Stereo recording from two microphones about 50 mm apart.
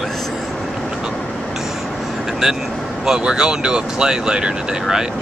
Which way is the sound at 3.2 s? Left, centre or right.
Centre.